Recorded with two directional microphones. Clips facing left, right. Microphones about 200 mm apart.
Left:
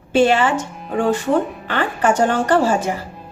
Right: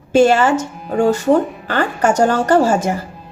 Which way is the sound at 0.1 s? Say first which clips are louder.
Right 3 dB; 45° right (ahead or behind).